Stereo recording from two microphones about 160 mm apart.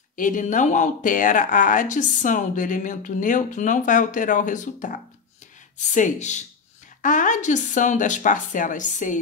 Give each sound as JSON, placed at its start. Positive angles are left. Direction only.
{"t": 0.1, "sound": "speech", "side_deg": 55}
{"t": 5.9, "sound": "speech", "side_deg": 50}